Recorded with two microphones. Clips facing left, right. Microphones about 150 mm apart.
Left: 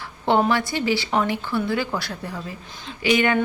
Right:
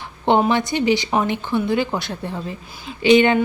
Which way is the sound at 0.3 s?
20° right (ahead or behind).